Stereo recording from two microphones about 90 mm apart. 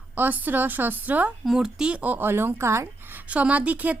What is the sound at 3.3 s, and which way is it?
Speech, 15° right (ahead or behind).